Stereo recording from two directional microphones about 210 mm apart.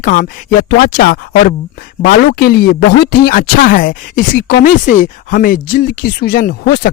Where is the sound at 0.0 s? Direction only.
40° left (ahead or behind).